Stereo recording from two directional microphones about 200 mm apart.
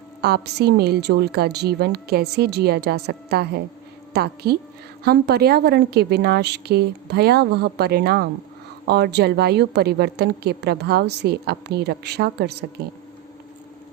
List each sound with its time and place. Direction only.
0.2 s a woman's voice: 55° right (ahead or behind)